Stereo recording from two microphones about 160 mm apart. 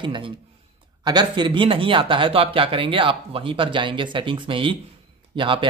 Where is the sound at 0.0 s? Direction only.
30° right (ahead or behind).